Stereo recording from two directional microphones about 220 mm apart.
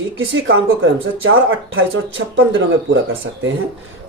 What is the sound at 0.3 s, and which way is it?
Speech, 60° right (ahead or behind).